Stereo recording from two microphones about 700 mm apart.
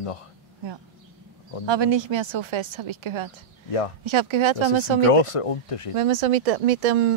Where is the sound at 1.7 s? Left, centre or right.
Right.